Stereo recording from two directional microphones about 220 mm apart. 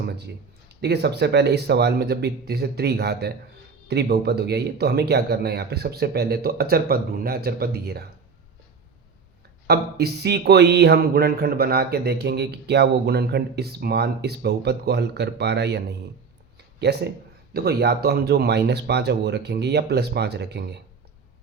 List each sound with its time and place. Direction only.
0.0 s a sound: 50° right (ahead or behind)
0.7 s speech: 50° right (ahead or behind)
9.6 s speech: 45° right (ahead or behind)